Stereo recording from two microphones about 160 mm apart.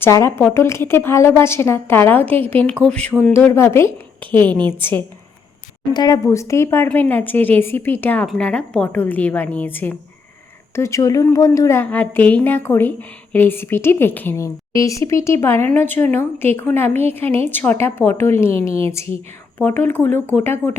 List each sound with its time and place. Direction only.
0.0 s a woman's voice: 15° left (ahead or behind)
5.9 s a woman's voice: 25° left (ahead or behind)
16.9 s a woman's voice: 40° right (ahead or behind)
17.5 s a woman's voice: 10° left (ahead or behind)
18.5 s a woman's voice: 35° right (ahead or behind)
18.9 s a woman's voice: 15° left (ahead or behind)